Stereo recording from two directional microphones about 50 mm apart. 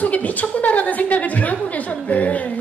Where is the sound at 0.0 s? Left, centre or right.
Left.